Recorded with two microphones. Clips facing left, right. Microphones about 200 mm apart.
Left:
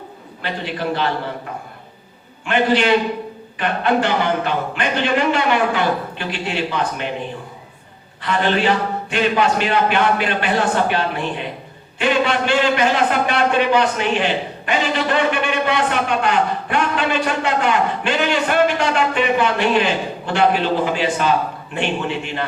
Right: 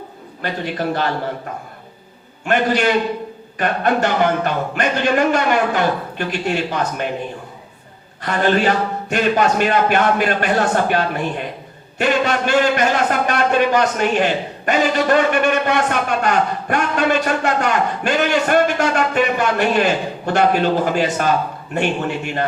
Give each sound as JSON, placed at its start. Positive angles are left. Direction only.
{"t": 0.4, "sound": "a man's voice", "side_deg": -45}
{"t": 2.4, "sound": "a man's voice", "side_deg": -45}
{"t": 8.2, "sound": "a man's voice", "side_deg": -45}